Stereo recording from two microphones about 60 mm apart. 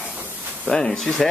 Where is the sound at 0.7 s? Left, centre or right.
Centre.